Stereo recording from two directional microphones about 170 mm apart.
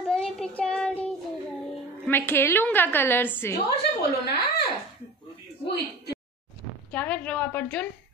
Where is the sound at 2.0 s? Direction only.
15° left (ahead or behind).